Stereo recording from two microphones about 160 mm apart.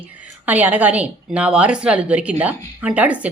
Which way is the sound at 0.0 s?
10° right (ahead or behind).